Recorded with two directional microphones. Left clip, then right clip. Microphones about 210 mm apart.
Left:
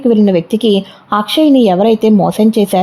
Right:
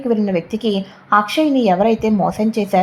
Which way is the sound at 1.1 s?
35° left (ahead or behind).